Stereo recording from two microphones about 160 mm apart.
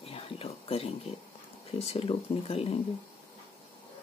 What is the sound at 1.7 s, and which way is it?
Speech, 40° left (ahead or behind).